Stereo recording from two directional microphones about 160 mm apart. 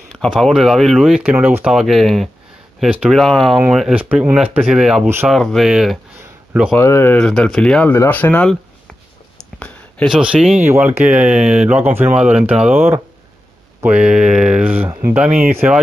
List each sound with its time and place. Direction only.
0.1 s speech: centre (ahead or behind)
6.7 s speech: 15° left (ahead or behind)
7.2 s speech: 5° left (ahead or behind)
9.4 s a sound: 10° left (ahead or behind)
10.0 s speech: 5° right (ahead or behind)